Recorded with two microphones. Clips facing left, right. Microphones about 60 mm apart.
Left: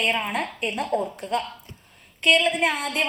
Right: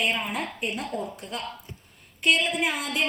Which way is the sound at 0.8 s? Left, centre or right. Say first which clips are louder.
Left 6 dB; left.